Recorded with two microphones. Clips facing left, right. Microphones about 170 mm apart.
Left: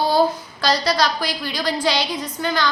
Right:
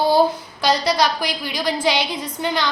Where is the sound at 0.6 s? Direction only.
20° right (ahead or behind).